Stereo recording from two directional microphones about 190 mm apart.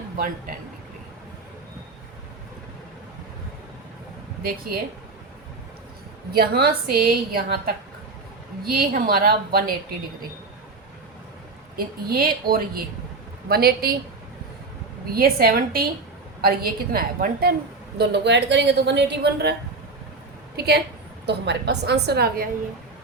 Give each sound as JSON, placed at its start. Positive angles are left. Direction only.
{"t": 6.3, "sound": "a woman's voice", "side_deg": -55}
{"t": 8.8, "sound": "a woman's voice", "side_deg": -50}
{"t": 11.8, "sound": "a woman's voice", "side_deg": -50}
{"t": 15.1, "sound": "a woman's voice", "side_deg": -50}
{"t": 17.9, "sound": "a woman's voice", "side_deg": -65}
{"t": 20.6, "sound": "a woman's voice", "side_deg": -55}